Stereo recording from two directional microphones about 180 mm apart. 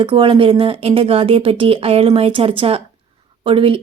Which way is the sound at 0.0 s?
30° right (ahead or behind).